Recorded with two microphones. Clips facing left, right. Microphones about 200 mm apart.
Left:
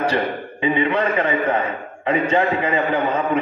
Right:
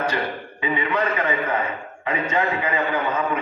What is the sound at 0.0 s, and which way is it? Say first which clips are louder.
A man's voice: left 4 dB; 30° left (ahead or behind).